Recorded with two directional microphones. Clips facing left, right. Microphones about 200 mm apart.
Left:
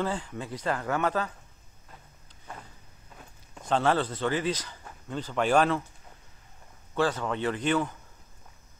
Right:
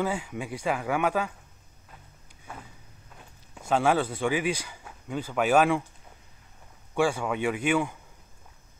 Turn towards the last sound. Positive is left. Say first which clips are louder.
# right 1 dB
turn(degrees=-10)  # may be behind; listen again after turning